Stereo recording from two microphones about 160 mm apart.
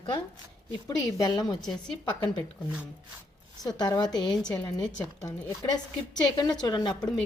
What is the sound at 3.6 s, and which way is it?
Speech, 25° left (ahead or behind).